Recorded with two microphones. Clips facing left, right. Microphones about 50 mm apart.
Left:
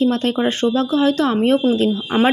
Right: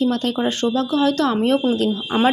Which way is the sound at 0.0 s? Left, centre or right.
Left.